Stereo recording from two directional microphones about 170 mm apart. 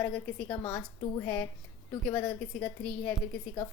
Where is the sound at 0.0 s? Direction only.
10° left (ahead or behind).